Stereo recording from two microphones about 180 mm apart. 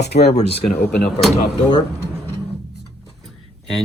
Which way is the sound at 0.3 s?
35° left (ahead or behind).